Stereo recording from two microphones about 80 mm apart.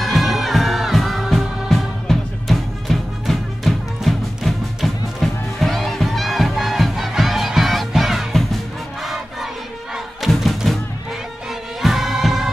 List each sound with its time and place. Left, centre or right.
0.0 s music: centre
11.8 s music: centre